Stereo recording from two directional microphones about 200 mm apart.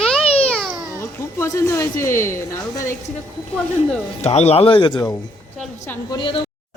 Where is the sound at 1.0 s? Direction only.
15° left (ahead or behind).